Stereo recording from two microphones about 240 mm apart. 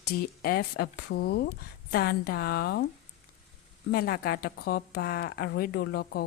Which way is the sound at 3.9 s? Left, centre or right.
Left.